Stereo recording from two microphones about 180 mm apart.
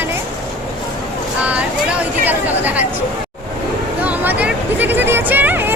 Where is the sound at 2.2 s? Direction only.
10° right (ahead or behind).